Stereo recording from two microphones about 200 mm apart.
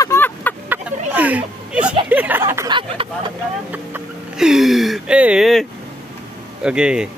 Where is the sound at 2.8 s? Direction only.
25° right (ahead or behind).